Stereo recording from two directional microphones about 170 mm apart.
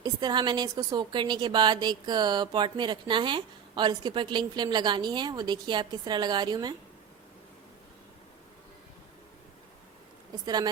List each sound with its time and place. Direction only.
0.0 s a woman's voice: 25° right (ahead or behind)
10.4 s a woman's voice: 25° right (ahead or behind)